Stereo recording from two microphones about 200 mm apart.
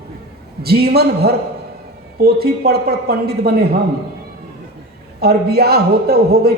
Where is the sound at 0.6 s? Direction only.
50° right (ahead or behind).